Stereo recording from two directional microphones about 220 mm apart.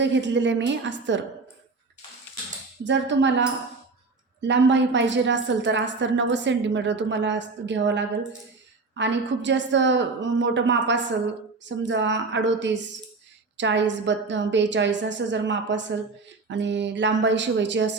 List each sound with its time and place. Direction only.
0.0 s a woman's voice: 55° right (ahead or behind)
2.8 s a woman's voice: 55° right (ahead or behind)